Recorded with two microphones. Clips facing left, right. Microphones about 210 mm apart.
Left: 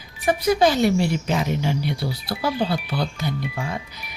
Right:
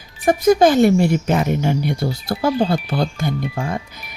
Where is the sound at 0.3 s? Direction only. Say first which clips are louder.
Right 5 dB; 45° right (ahead or behind).